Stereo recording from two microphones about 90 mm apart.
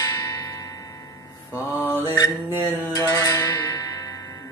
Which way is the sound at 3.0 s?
40° left (ahead or behind).